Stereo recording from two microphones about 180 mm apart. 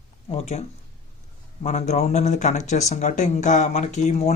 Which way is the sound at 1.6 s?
40° left (ahead or behind).